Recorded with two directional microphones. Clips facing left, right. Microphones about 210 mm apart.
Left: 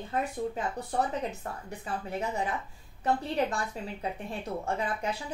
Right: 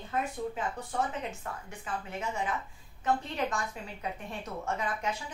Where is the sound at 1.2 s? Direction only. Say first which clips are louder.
Left 3 dB; 35° left (ahead or behind).